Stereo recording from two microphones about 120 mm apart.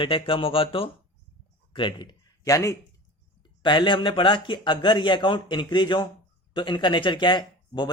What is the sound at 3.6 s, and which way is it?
Speech, 40° left (ahead or behind).